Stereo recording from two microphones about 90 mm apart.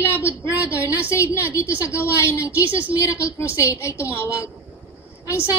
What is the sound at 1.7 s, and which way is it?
Speech, 20° right (ahead or behind).